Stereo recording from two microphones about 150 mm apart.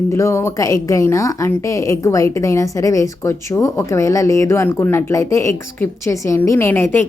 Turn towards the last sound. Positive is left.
turn(degrees=15)  # may be behind; listen again after turning